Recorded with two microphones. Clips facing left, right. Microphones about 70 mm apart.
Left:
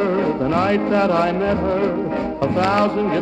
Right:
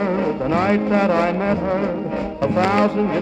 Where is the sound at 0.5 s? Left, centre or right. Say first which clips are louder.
Right 1 dB; right.